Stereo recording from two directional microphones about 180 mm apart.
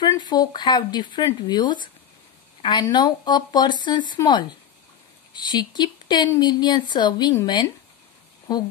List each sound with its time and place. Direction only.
0.0 s speech: 25° left (ahead or behind)